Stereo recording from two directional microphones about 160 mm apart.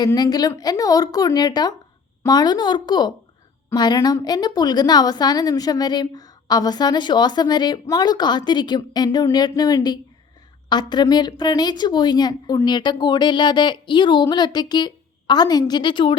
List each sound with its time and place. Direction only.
0.0 s a woman's voice: 25° left (ahead or behind)